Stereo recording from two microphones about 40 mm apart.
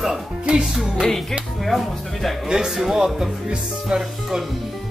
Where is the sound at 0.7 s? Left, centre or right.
Centre.